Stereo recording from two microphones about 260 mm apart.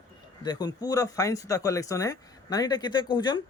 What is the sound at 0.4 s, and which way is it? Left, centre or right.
Speech, centre.